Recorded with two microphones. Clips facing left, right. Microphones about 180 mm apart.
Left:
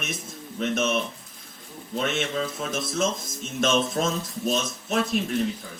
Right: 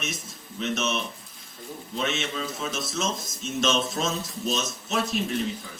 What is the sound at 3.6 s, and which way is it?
Speech, 55° left (ahead or behind).